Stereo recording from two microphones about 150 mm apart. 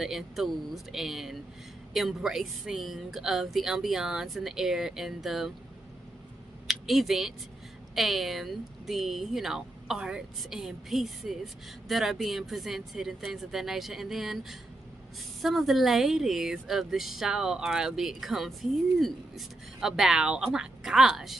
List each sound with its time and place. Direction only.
0.0 s speech: centre (ahead or behind)
6.7 s speech: centre (ahead or behind)